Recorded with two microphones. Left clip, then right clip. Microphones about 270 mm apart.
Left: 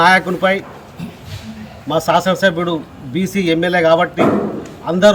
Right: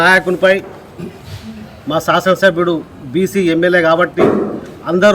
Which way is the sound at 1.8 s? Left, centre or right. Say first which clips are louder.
Right 2 dB; centre.